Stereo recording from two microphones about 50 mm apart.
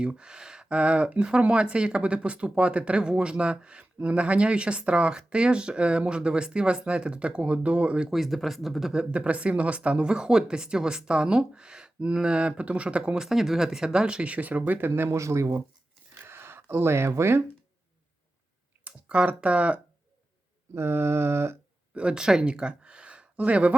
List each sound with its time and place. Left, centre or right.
0.0 s speech: centre
8.1 s speech: centre
8.9 s speech: right
13.1 s speech: centre; by 15.1 s right
15.1 s speech: right
16.2 s a sound: right
18.9 s speech: right
20.7 s a sound: right
21.9 s speech: centre